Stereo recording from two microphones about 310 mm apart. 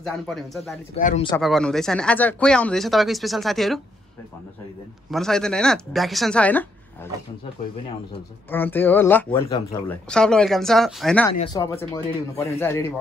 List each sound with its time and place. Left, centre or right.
0.0 s speech: centre
0.9 s speech: left
1.3 s speech: centre
5.1 s speech: centre
8.5 s speech: centre
11.3 s speech: centre